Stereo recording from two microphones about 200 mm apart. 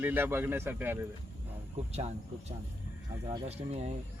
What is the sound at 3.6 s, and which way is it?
Speech, 30° right (ahead or behind).